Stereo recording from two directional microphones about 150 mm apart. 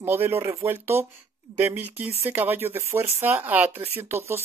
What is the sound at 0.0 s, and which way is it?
Speech, 15° right (ahead or behind).